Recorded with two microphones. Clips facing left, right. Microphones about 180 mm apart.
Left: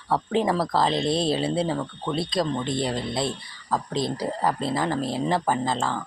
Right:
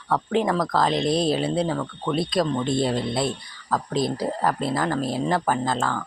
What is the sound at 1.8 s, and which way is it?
Speech, 20° left (ahead or behind).